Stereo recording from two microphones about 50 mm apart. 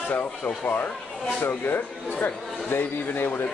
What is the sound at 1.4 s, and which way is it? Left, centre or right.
Speech, left.